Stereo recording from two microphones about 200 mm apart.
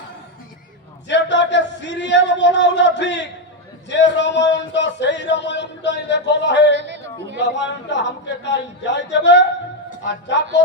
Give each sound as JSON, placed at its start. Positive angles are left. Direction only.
{"t": 1.0, "sound": "a man's voice", "side_deg": 60}
{"t": 6.7, "sound": "chatter", "side_deg": -60}
{"t": 7.3, "sound": "a man's voice", "side_deg": 60}